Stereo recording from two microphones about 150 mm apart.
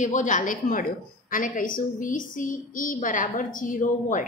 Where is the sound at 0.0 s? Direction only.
55° left (ahead or behind).